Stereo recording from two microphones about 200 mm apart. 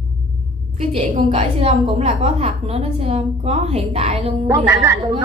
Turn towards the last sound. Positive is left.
turn(degrees=-20)  # may be behind; listen again after turning